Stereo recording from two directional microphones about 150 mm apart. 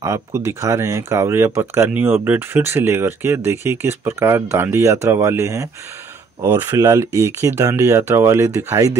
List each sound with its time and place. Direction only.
0.0 s speech: 20° right (ahead or behind)